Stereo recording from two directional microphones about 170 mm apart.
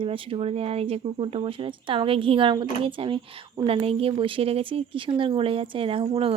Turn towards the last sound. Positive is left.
turn(degrees=-35)  # may be behind; listen again after turning